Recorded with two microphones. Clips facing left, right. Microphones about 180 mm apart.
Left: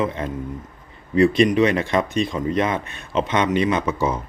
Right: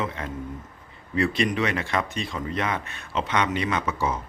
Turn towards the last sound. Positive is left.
turn(degrees=20)  # may be behind; listen again after turning